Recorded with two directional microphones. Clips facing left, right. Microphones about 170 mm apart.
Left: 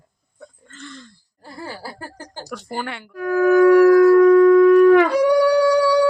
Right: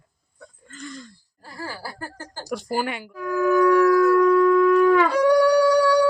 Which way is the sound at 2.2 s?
15° left (ahead or behind).